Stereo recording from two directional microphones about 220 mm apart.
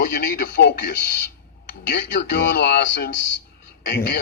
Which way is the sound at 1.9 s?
50° left (ahead or behind).